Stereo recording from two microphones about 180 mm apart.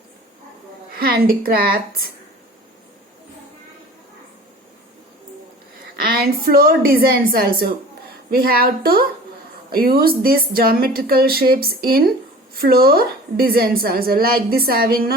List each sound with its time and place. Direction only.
0.9 s a woman's voice: 55° right (ahead or behind)
6.0 s a woman's voice: 55° right (ahead or behind)